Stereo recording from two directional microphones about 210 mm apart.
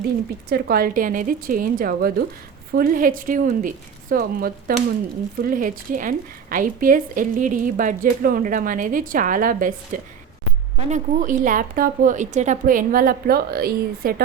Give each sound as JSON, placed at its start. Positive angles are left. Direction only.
{"t": 0.5, "sound": "a woman's voice", "side_deg": -45}